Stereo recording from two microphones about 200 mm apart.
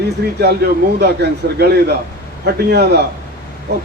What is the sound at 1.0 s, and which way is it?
A man's voice, 55° right (ahead or behind).